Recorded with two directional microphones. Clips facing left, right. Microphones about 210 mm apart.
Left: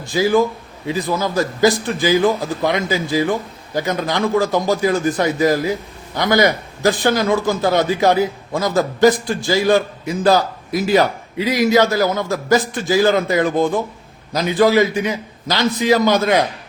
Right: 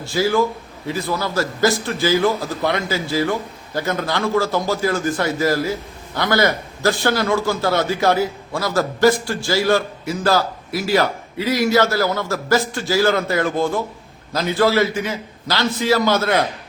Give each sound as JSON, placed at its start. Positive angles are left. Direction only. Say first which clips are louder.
{"t": 0.0, "sound": "a man's voice", "louder": "left 3 dB", "side_deg": 15}